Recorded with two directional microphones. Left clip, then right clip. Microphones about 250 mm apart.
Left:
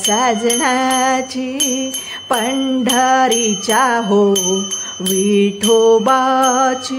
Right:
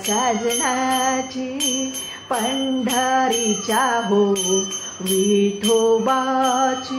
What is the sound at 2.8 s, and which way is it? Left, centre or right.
Music, left.